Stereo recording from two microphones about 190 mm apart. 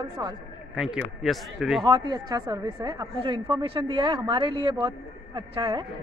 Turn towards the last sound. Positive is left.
turn(degrees=-25)  # may be behind; listen again after turning